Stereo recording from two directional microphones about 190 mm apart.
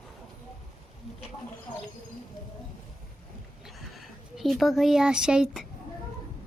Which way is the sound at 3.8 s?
Centre (ahead or behind).